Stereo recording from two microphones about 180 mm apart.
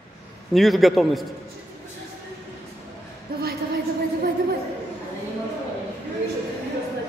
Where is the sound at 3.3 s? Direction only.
55° right (ahead or behind).